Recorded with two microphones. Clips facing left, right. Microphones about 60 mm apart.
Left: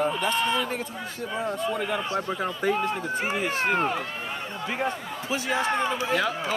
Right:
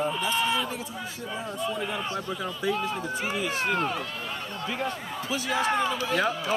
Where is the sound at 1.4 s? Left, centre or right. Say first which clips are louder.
Left 3 dB; left.